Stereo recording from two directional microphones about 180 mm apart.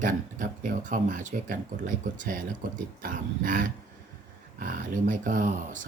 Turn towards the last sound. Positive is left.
turn(degrees=-45)  # may be behind; listen again after turning